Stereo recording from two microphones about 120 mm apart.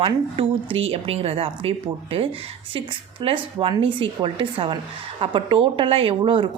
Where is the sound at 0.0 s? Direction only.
50° right (ahead or behind).